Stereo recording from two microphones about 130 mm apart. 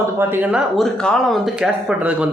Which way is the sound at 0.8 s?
Centre (ahead or behind).